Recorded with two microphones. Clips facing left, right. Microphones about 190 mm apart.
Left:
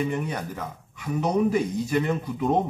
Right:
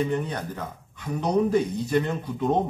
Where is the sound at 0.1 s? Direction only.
10° left (ahead or behind).